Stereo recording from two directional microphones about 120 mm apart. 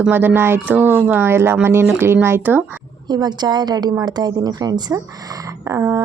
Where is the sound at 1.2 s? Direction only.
20° right (ahead or behind).